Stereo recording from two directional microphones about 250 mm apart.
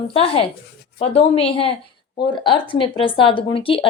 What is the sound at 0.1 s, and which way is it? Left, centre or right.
Speech, left.